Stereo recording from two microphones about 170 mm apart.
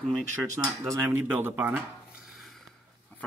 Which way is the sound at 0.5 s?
20° right (ahead or behind).